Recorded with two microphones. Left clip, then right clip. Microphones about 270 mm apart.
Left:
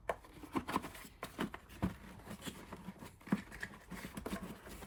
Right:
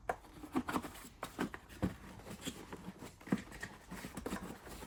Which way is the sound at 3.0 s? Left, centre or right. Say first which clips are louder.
Right 1 dB; centre.